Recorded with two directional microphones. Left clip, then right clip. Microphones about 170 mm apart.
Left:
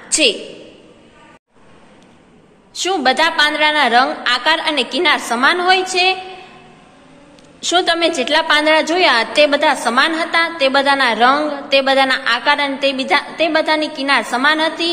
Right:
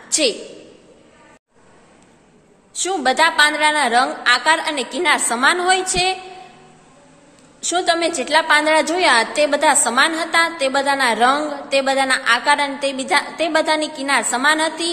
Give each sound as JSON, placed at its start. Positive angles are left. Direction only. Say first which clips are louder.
{"t": 0.1, "sound": "a woman's voice", "louder": "left 4 dB", "side_deg": -15}
{"t": 2.7, "sound": "a woman's voice", "louder": "left 3 dB", "side_deg": -15}
{"t": 7.6, "sound": "a woman's voice", "louder": "left 3 dB", "side_deg": -10}